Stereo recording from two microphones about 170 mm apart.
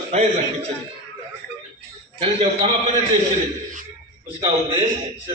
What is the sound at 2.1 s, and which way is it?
Speech, 35° right (ahead or behind).